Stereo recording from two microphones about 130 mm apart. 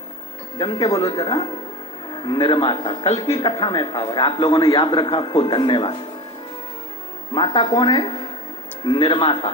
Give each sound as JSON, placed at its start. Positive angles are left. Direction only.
{"t": 0.6, "sound": "a man's voice", "side_deg": 35}
{"t": 7.3, "sound": "a man's voice", "side_deg": 40}